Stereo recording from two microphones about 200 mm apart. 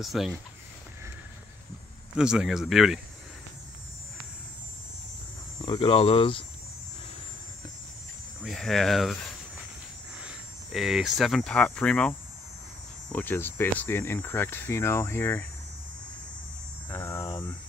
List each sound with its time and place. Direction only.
0.0 s speech: centre (ahead or behind)
2.1 s speech: 5° right (ahead or behind)
5.7 s speech: 25° left (ahead or behind)
8.5 s speech: centre (ahead or behind)
10.2 s speech: centre (ahead or behind)
16.9 s a sound: 15° left (ahead or behind)